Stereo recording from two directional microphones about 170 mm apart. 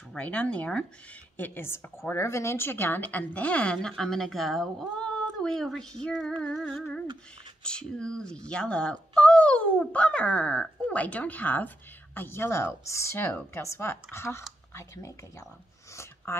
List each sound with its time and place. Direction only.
0.1 s speech: 5° left (ahead or behind)
6.0 s humming: centre (ahead or behind)
7.6 s speech: 5° left (ahead or behind)
15.9 s a sound: 15° left (ahead or behind)